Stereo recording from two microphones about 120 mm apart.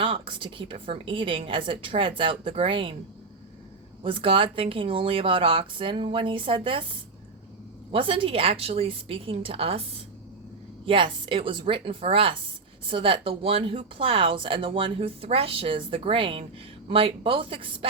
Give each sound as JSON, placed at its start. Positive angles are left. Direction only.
{"t": 0.0, "sound": "speech", "side_deg": -45}
{"t": 4.0, "sound": "speech", "side_deg": -45}